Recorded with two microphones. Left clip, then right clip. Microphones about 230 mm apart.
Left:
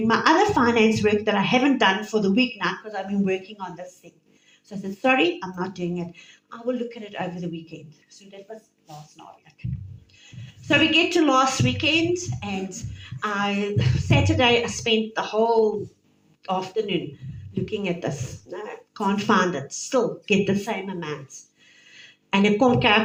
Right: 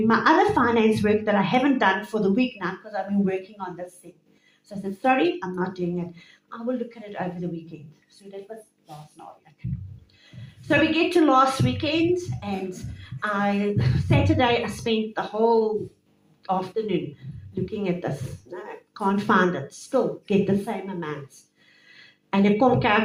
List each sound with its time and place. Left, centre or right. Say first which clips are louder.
0.1 s a woman's voice: left 1 dB; left
4.8 s a woman's voice: left 1 dB; left
9.6 s a woman's voice: right 1 dB; left
22.3 s a woman's voice: left 1 dB; left